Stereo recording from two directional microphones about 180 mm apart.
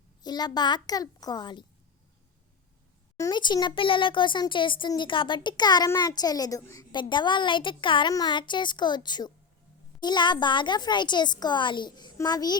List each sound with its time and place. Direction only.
0.2 s a child's voice: 25° left (ahead or behind)
3.2 s a child's voice: 20° left (ahead or behind)